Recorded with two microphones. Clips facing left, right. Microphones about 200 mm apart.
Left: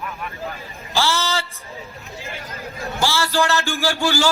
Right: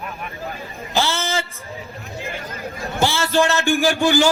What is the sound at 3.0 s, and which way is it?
A man's voice, 20° right (ahead or behind).